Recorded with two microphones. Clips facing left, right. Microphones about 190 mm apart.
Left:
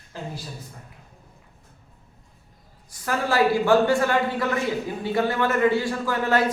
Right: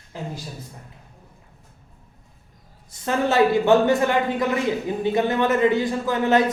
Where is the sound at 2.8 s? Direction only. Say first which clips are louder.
Right 3 dB; 25° right (ahead or behind).